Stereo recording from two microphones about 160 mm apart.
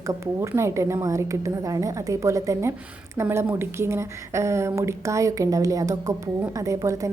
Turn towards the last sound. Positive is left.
turn(degrees=-20)  # may be behind; listen again after turning